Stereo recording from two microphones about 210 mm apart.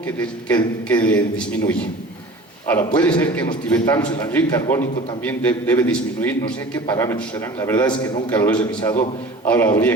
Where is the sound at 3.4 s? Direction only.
20° left (ahead or behind).